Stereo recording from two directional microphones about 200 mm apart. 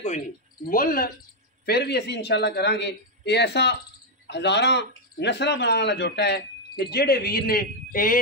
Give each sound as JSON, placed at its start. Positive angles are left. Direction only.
{"t": 0.7, "sound": "a man's voice", "side_deg": 45}